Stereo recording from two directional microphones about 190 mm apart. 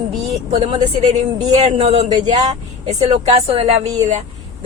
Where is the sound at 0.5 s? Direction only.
30° right (ahead or behind).